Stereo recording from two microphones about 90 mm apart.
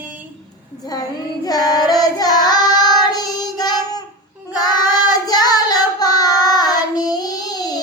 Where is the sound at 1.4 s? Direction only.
45° left (ahead or behind).